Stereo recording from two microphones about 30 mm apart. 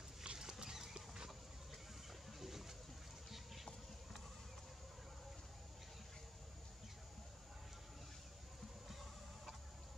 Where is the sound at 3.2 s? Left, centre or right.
Centre.